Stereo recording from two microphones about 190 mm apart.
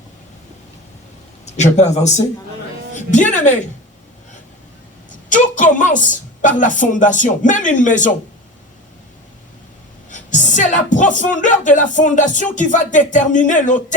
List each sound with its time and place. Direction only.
1.7 s speech: 35° left (ahead or behind)
5.7 s a woman's voice: 40° left (ahead or behind)
10.1 s speech: 40° left (ahead or behind)